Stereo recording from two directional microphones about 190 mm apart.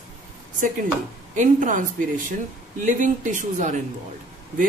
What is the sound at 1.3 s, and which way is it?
Speech, 40° right (ahead or behind).